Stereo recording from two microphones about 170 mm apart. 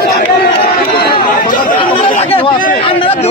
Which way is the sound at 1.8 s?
30° left (ahead or behind).